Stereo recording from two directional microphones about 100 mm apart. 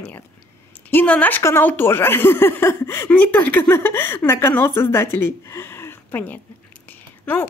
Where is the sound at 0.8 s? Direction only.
15° left (ahead or behind).